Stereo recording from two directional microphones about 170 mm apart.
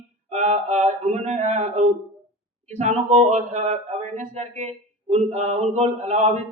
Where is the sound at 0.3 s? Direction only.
40° right (ahead or behind).